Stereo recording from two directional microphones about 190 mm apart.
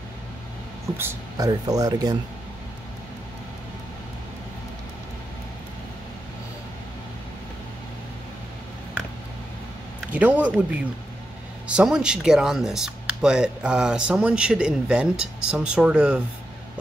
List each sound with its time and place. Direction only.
0.9 s speech: 15° right (ahead or behind)
10.1 s speech: 5° right (ahead or behind)